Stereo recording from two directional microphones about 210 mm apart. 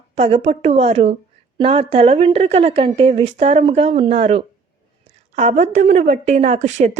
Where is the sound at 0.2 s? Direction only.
30° right (ahead or behind).